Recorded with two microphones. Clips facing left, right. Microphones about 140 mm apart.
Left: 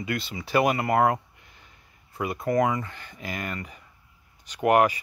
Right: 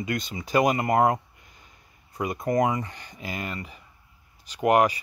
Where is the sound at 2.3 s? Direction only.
20° right (ahead or behind).